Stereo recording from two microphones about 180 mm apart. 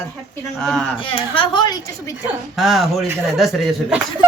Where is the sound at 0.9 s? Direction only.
30° left (ahead or behind).